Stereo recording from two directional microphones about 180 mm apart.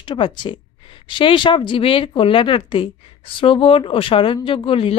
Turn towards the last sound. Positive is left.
turn(degrees=30)  # may be behind; listen again after turning